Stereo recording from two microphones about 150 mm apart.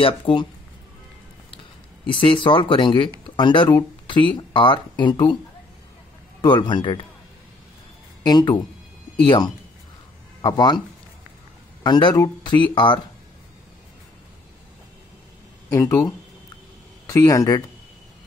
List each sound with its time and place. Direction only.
0.0 s speech: 35° left (ahead or behind)
2.0 s speech: 35° left (ahead or behind)
6.4 s speech: 30° left (ahead or behind)
8.2 s speech: 30° left (ahead or behind)
11.8 s speech: 30° left (ahead or behind)
15.7 s speech: 20° left (ahead or behind)